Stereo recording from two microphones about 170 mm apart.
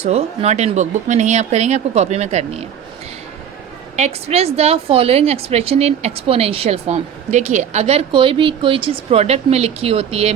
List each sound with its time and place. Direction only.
0.0 s a woman's voice: 40° right (ahead or behind)
3.9 s a woman's voice: 40° right (ahead or behind)